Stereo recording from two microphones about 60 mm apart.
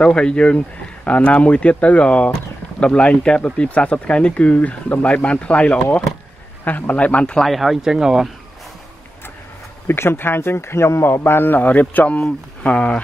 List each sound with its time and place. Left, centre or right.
0.0 s speech: centre
7.3 s speech: centre
9.8 s a man's voice: left; by 13.0 s centre